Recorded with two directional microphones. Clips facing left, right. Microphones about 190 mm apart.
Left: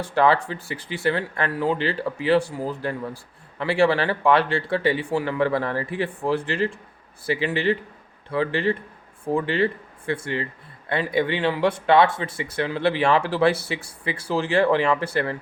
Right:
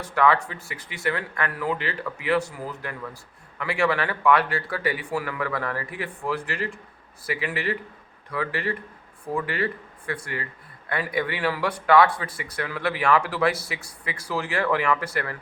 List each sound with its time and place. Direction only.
0.0 s speech: 30° left (ahead or behind)